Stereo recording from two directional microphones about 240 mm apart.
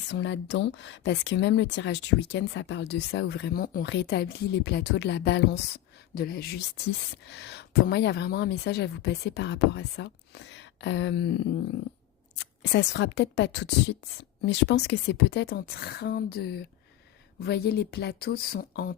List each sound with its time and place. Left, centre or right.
0.1 s a woman's voice: left